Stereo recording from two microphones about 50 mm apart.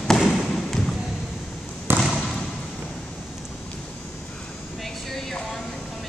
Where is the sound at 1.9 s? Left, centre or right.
Right.